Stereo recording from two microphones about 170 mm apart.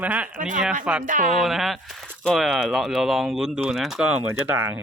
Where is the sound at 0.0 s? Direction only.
10° right (ahead or behind).